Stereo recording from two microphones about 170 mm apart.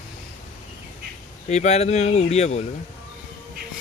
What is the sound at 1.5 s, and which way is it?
Speech, 40° left (ahead or behind).